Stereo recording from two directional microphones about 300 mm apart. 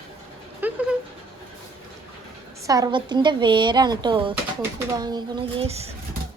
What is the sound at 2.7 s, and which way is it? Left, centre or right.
Speech, centre.